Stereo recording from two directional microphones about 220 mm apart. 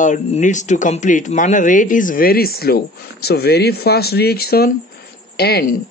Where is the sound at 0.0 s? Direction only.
35° left (ahead or behind).